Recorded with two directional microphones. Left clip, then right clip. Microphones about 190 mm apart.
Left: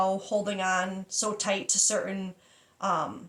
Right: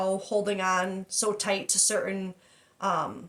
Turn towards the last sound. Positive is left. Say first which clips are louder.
# even
turn(degrees=-40)  # may be behind; listen again after turning